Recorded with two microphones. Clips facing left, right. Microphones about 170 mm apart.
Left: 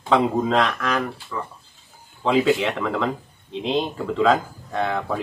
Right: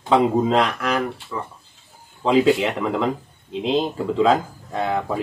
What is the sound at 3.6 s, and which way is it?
Speech, 35° right (ahead or behind).